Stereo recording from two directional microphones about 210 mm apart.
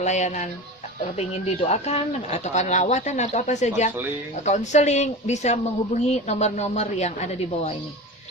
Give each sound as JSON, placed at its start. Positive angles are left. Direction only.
{"t": 0.0, "sound": "speech", "side_deg": 35}
{"t": 1.6, "sound": "speech", "side_deg": 30}